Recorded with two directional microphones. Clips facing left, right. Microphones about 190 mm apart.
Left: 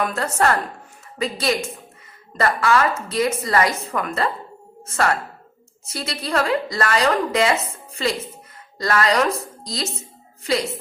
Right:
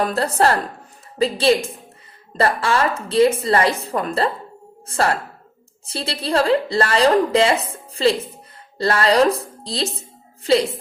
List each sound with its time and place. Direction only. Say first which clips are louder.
0.0 s a woman's voice: right 3 dB; 35° right (ahead or behind)